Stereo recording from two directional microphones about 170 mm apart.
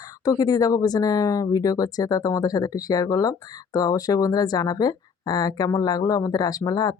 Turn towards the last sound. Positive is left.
turn(degrees=20)  # may be behind; listen again after turning